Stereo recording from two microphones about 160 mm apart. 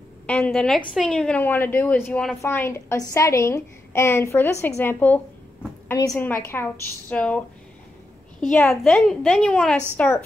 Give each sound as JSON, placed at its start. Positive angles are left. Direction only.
{"t": 0.3, "sound": "a woman's voice", "side_deg": 5}